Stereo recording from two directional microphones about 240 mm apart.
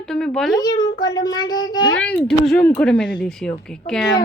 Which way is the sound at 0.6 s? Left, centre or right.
Centre.